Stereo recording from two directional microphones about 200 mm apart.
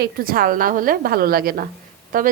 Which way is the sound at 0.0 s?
45° right (ahead or behind).